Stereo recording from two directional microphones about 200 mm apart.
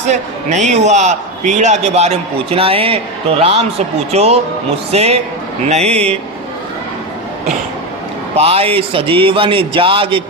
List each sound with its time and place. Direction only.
0.1 s a man's voice: 35° right (ahead or behind)
8.4 s a man's voice: 30° right (ahead or behind)